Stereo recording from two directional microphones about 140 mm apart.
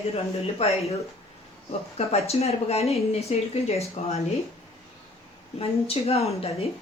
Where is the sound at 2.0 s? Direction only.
50° left (ahead or behind).